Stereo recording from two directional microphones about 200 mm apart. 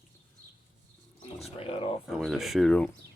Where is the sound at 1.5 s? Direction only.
30° left (ahead or behind).